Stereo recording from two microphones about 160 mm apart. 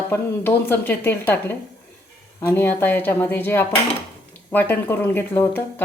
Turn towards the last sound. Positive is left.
turn(degrees=15)  # may be behind; listen again after turning